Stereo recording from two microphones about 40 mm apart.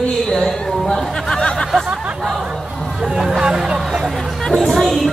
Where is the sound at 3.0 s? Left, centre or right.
Centre.